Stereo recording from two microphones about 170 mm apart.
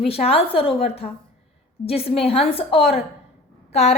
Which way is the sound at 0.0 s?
35° left (ahead or behind).